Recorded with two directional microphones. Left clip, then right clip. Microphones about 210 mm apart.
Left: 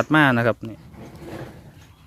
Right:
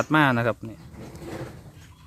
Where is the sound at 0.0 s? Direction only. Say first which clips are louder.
Left 3 dB; 20° left (ahead or behind).